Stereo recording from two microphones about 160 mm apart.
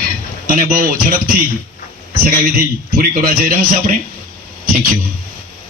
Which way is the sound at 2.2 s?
65° right (ahead or behind).